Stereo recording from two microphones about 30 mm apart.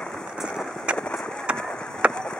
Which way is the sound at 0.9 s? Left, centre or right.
Right.